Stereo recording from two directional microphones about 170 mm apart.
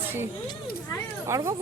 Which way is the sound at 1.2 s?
15° right (ahead or behind).